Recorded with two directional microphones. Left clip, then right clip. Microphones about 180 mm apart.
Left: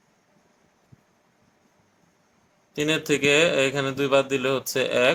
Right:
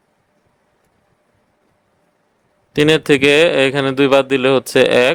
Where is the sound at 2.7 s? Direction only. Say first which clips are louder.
Right 11 dB; 60° right (ahead or behind).